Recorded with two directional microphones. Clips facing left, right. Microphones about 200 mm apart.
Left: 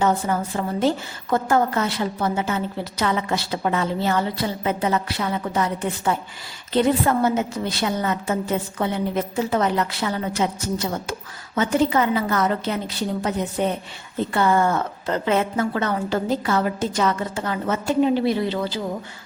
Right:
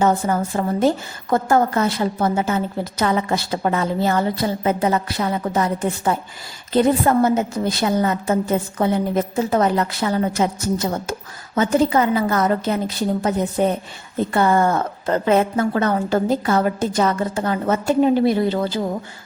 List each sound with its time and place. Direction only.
0.0 s a woman's voice: 45° right (ahead or behind)